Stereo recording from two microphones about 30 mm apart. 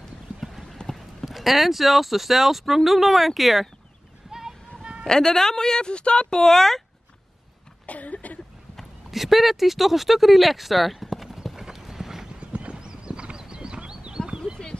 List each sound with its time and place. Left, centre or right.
0.4 s clip-clop: centre
0.8 s speech: centre
4.3 s a sound: centre
5.0 s speech: centre
5.9 s speech: left
6.3 s speech: centre
7.8 s a sound: left
9.1 s speech: centre
11.4 s clip-clop: centre
12.4 s clip-clop: right